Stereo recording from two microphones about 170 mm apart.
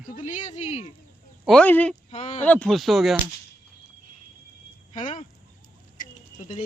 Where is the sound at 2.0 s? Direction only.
40° left (ahead or behind).